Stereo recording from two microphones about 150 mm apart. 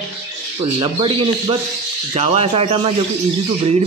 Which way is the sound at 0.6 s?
35° right (ahead or behind).